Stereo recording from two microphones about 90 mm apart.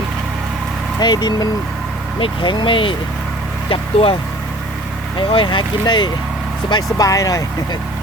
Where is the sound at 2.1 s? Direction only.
60° left (ahead or behind).